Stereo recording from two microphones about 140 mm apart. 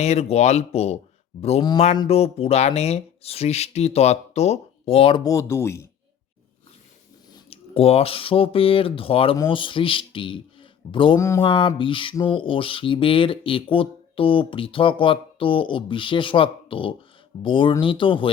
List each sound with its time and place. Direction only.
0.0 s speech: 50° left (ahead or behind)
5.2 s speech: 25° left (ahead or behind)
7.5 s speech: 45° left (ahead or behind)
11.2 s speech: 20° left (ahead or behind)
11.4 s speech: 35° left (ahead or behind)